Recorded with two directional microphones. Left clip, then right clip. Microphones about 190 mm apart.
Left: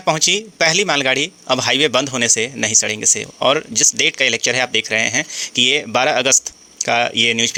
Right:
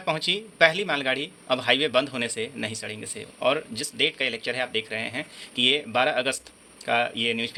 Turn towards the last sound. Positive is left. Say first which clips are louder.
# left 11 dB
turn(degrees=40)  # may be behind; listen again after turning